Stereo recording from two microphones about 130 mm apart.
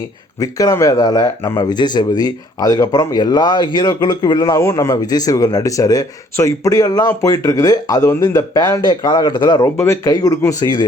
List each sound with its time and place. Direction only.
0.3 s speech: 25° left (ahead or behind)
9.7 s speech: 20° left (ahead or behind)